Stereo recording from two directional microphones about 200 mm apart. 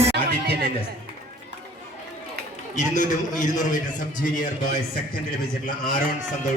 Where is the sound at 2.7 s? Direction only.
35° left (ahead or behind).